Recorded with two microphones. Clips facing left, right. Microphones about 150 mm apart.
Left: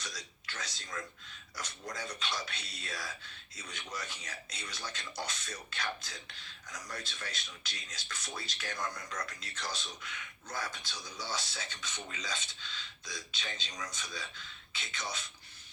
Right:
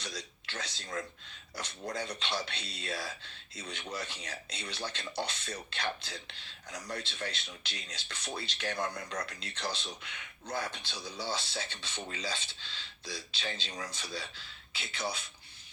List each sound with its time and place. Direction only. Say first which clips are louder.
0.0 s speech: right 4 dB; 30° right (ahead or behind)
2.6 s speech: right 4 dB; 60° right (ahead or behind)
2.8 s speech: right 5 dB; 30° right (ahead or behind)
10.9 s speech: right 4 dB; 30° right (ahead or behind)